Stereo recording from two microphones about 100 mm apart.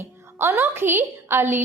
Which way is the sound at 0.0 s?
25° right (ahead or behind).